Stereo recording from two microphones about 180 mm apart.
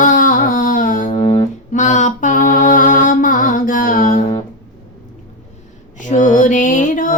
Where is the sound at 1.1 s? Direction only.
25° left (ahead or behind).